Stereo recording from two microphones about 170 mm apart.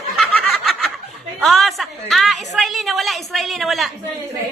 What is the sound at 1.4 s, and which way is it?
A woman's voice, centre (ahead or behind).